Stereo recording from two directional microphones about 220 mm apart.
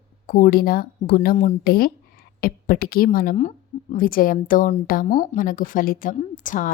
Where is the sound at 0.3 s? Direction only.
40° left (ahead or behind).